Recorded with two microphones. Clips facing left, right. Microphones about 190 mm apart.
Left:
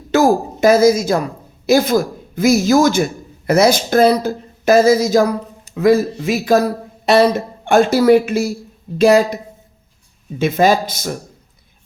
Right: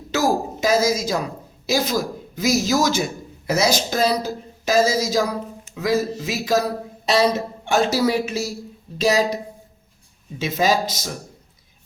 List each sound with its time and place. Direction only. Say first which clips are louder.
0.1 s a woman's voice: left 7 dB; 55° left (ahead or behind)